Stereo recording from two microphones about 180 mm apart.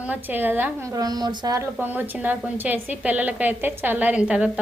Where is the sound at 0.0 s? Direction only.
10° right (ahead or behind).